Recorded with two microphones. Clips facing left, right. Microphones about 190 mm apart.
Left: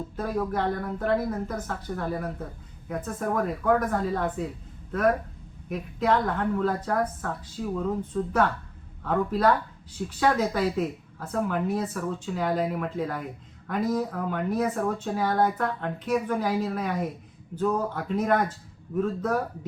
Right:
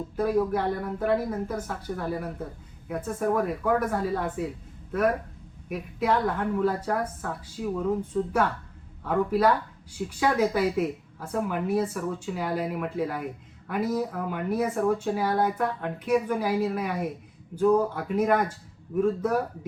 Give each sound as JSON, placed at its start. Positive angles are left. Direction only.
{"t": 0.2, "sound": "speech", "side_deg": -10}